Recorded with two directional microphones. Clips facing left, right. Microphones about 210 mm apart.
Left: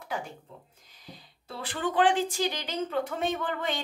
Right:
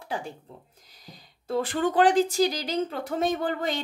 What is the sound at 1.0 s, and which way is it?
Speech, 45° right (ahead or behind).